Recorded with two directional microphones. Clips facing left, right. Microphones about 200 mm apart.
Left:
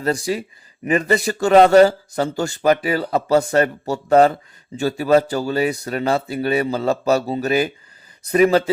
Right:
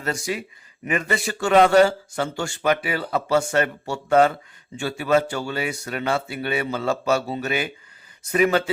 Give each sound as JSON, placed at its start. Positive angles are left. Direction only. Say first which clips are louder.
{"t": 0.0, "sound": "a man's voice", "louder": "left 6 dB", "side_deg": 35}